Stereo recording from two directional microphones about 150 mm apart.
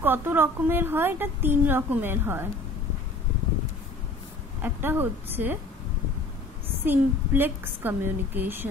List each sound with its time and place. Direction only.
0.0 s a woman's voice: 15° right (ahead or behind)
4.6 s a woman's voice: 15° right (ahead or behind)
6.8 s a woman's voice: 15° right (ahead or behind)